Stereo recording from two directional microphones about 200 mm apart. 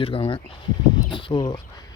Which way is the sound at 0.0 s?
25° left (ahead or behind).